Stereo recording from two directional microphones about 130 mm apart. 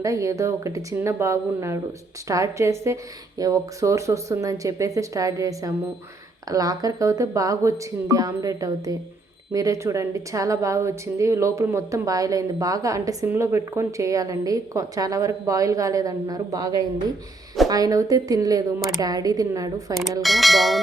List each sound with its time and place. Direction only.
0.0 s a woman's voice: 25° right (ahead or behind)
19.9 s speech: centre (ahead or behind)